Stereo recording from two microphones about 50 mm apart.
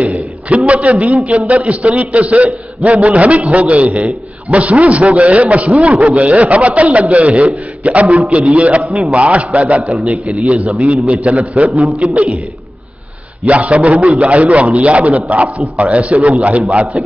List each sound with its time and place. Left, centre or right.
0.0 s a sound: right
0.7 s a man's voice: right
13.5 s a man's voice: right